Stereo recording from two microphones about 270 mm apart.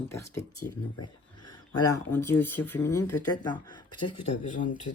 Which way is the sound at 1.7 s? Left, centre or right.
Centre.